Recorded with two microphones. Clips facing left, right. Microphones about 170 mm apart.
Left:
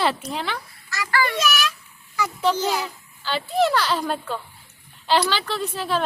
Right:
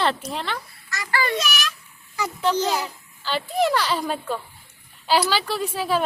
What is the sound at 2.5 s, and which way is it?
Speech, 20° right (ahead or behind).